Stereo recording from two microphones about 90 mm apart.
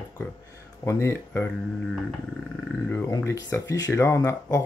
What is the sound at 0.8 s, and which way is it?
Speech, 30° left (ahead or behind).